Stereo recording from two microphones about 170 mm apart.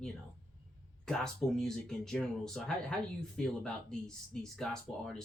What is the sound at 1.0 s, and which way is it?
Speech, 5° left (ahead or behind).